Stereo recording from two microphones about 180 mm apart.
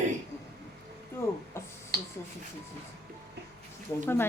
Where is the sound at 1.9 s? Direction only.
60° right (ahead or behind).